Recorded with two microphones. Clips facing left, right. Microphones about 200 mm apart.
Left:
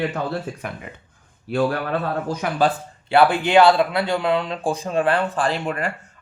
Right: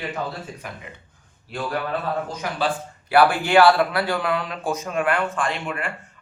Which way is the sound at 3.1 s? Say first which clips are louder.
Left 1 dB; 25° left (ahead or behind).